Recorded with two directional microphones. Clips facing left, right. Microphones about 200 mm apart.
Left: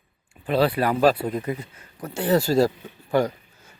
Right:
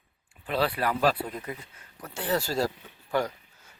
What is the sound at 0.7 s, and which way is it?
Speech, 30° left (ahead or behind).